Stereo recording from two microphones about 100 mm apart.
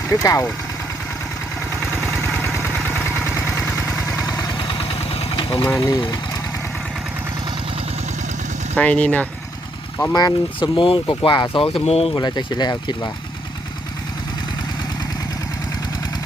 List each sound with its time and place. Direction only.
0.1 s speech: 30° left (ahead or behind)
2.6 s vehicle: 20° left (ahead or behind)
4.2 s engine: 40° left (ahead or behind)
4.7 s engine: 70° left (ahead or behind)
5.6 s speech: 35° left (ahead or behind)
8.7 s speech: 15° left (ahead or behind)
10.2 s speech: 50° left (ahead or behind)
11.9 s speech: 85° left
12.1 s speech: 45° left (ahead or behind)